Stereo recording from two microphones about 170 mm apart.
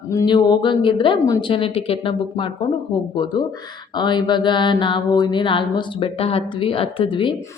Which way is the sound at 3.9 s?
25° left (ahead or behind).